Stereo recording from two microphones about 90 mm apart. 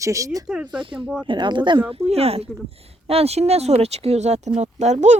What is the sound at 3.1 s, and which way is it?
Speech, 90° right.